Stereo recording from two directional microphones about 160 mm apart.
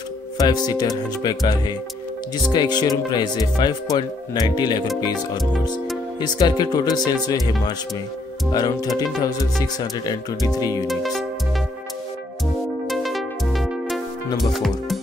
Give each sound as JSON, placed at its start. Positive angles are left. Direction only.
{"t": 0.4, "sound": "speech", "side_deg": 25}
{"t": 6.1, "sound": "speech", "side_deg": 25}
{"t": 8.5, "sound": "speech", "side_deg": 25}
{"t": 10.9, "sound": "music", "side_deg": 0}
{"t": 12.8, "sound": "music", "side_deg": 0}